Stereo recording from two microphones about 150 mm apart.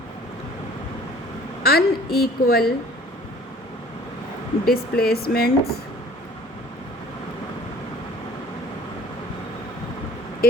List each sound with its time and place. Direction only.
1.6 s speech: 90° left
4.6 s speech: 90° left